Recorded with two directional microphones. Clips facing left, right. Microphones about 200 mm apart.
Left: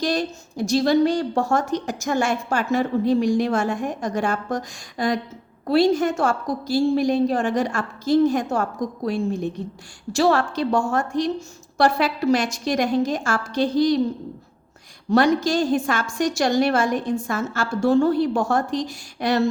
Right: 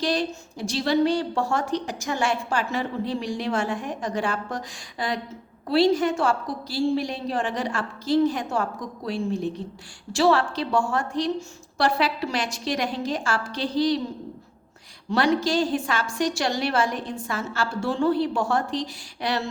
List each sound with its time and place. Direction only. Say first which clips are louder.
0.0 s a woman's voice: left 2 dB; 45° left (ahead or behind)
15.1 s a woman's voice: left 4 dB; 45° left (ahead or behind)